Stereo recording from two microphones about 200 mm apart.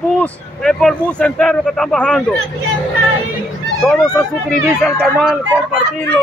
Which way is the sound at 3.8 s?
5° left (ahead or behind).